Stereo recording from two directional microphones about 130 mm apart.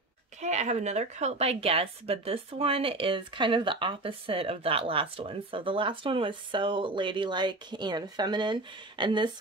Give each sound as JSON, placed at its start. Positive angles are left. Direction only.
{"t": 0.4, "sound": "a woman's voice", "side_deg": -60}